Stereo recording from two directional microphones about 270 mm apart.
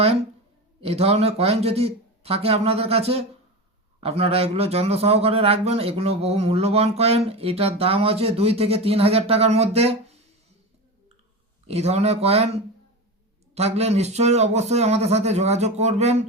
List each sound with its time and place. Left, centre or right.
0.8 s a man's voice: right
11.6 s a man's voice: right